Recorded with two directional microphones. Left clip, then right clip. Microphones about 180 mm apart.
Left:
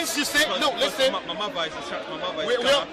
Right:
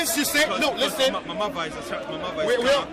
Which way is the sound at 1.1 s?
15° left (ahead or behind).